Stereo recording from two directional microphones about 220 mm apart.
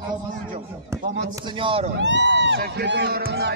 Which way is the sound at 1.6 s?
25° right (ahead or behind).